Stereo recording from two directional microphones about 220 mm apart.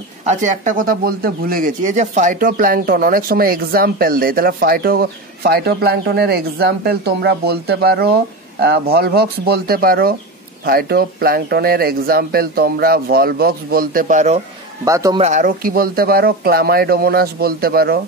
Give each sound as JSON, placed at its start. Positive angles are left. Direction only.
{"t": 0.2, "sound": "speech", "side_deg": -35}
{"t": 14.9, "sound": "speech", "side_deg": -15}
{"t": 15.1, "sound": "speech", "side_deg": -30}